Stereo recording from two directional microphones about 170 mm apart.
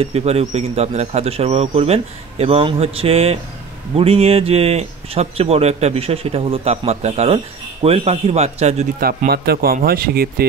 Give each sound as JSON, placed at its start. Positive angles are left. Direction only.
{"t": 0.0, "sound": "a man's voice", "side_deg": -40}
{"t": 9.0, "sound": "speech", "side_deg": -65}